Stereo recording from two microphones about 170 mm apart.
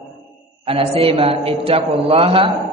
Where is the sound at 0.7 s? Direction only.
35° right (ahead or behind).